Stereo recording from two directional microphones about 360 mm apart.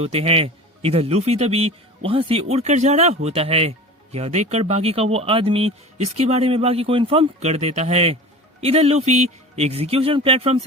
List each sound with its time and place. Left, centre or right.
0.0 s speech: centre